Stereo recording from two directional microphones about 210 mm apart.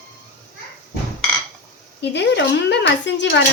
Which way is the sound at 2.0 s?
55° left (ahead or behind).